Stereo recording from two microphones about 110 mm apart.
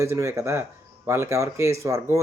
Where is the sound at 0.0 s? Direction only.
25° right (ahead or behind).